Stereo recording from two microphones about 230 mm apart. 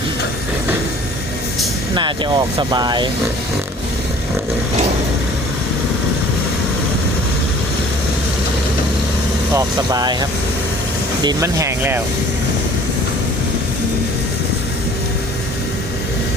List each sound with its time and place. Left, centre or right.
2.0 s speech: centre
9.6 s speech: centre